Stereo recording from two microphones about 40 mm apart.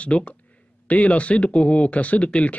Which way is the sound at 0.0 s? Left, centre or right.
Left.